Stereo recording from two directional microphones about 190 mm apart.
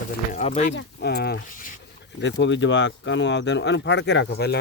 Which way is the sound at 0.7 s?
60° left (ahead or behind).